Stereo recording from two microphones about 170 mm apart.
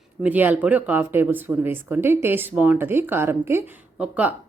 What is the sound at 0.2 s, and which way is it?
Speech, 10° right (ahead or behind).